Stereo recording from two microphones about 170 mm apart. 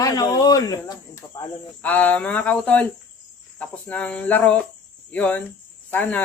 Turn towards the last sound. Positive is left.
turn(degrees=10)  # may be behind; listen again after turning